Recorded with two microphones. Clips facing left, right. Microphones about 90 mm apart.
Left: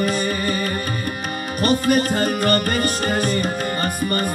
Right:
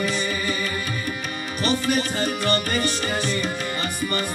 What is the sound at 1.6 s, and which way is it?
Music, 45° left (ahead or behind).